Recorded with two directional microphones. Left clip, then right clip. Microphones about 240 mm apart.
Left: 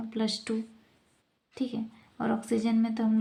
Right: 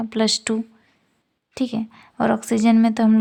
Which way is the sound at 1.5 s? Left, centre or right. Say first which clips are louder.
Right 9 dB; right.